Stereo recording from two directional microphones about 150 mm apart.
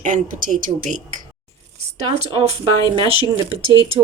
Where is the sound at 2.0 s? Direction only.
45° right (ahead or behind).